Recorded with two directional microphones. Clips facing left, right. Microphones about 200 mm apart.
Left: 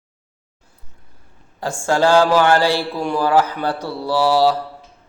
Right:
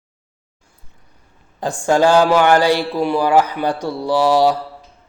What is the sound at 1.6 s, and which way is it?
Speech, 15° right (ahead or behind).